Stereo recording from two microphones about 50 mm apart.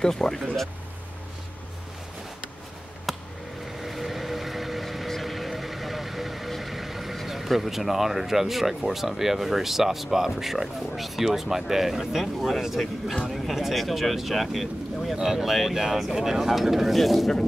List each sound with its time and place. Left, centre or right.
0.0 s speech: centre
3.1 s a sound: centre
3.8 s vehicle: centre
13.3 s speech: centre